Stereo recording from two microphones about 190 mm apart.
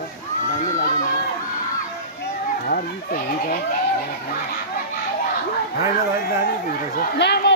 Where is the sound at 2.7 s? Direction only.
50° left (ahead or behind).